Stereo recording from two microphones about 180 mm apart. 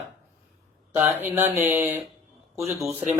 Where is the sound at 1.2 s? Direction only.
10° right (ahead or behind).